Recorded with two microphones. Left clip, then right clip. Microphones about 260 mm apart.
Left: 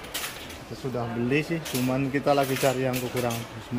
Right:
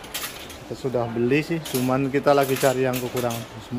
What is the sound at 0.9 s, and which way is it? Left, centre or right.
Speech, centre.